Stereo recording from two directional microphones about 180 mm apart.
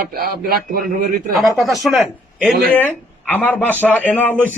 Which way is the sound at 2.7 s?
10° left (ahead or behind).